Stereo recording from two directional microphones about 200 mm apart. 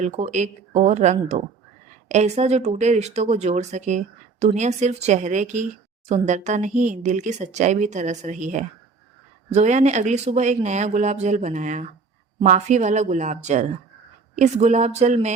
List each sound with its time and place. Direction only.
0.0 s speech: 35° right (ahead or behind)